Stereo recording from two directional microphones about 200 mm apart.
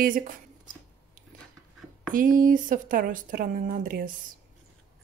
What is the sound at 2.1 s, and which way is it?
A woman's voice, 45° right (ahead or behind).